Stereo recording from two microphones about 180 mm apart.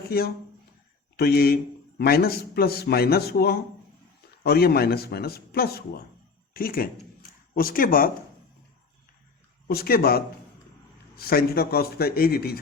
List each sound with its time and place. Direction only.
0.1 s speech: 60° left (ahead or behind)
9.6 s speech: 55° left (ahead or behind)